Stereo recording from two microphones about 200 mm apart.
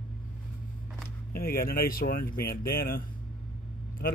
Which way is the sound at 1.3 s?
45° left (ahead or behind).